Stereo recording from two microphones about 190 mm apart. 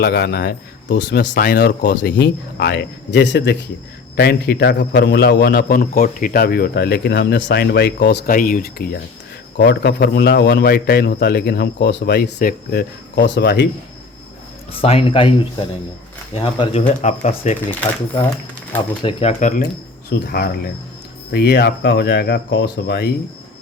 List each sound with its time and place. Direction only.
0.0 s a man's voice: 60° left (ahead or behind)
8.4 s speech: 45° left (ahead or behind)
9.6 s a man's voice: 60° left (ahead or behind)
14.7 s speech: 30° left (ahead or behind)
19.0 s speech: 35° left (ahead or behind)
20.1 s a man's voice: 55° left (ahead or behind)